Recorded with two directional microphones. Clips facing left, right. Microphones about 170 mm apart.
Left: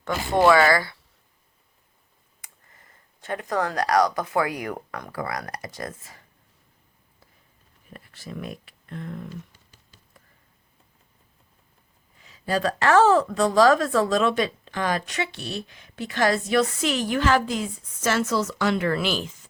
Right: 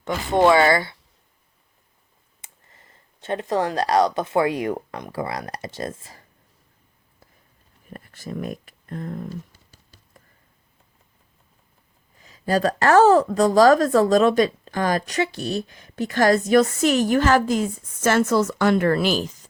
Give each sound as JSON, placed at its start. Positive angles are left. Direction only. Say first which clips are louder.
{"t": 0.0, "sound": "speech", "louder": "right 2 dB", "side_deg": -20}
{"t": 2.4, "sound": "speech", "louder": "right 1 dB", "side_deg": -25}
{"t": 7.9, "sound": "a sound", "louder": "right 5 dB", "side_deg": -45}
{"t": 12.2, "sound": "a woman's voice", "louder": "right 4 dB", "side_deg": -40}